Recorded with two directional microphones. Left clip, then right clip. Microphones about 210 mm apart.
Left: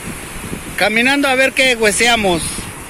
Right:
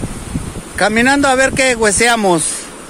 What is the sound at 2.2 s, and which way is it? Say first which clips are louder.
Speech: right 3 dB; 40° right (ahead or behind).